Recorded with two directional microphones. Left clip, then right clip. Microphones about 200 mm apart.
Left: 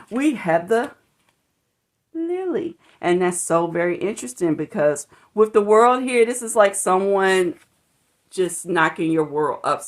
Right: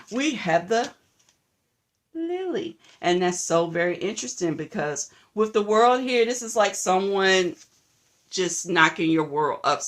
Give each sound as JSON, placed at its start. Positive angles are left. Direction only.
{"t": 0.1, "sound": "speech", "side_deg": 40}
{"t": 2.1, "sound": "speech", "side_deg": 35}
{"t": 8.3, "sound": "speech", "side_deg": 25}